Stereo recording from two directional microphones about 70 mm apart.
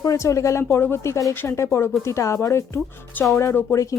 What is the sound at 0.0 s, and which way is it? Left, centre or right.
Speech, left.